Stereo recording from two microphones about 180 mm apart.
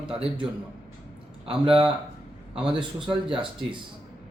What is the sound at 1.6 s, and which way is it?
Speech, 30° right (ahead or behind).